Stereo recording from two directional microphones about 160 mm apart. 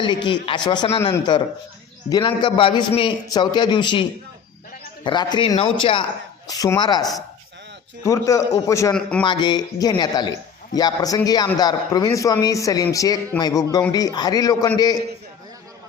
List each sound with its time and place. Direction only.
0.0 s a man's voice: 30° left (ahead or behind)
5.0 s a man's voice: 30° left (ahead or behind)
8.9 s a man's voice: 5° left (ahead or behind)
9.2 s a man's voice: 30° left (ahead or behind)